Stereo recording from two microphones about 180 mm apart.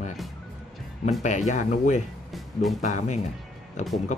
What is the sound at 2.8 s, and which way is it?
Speech, 40° left (ahead or behind).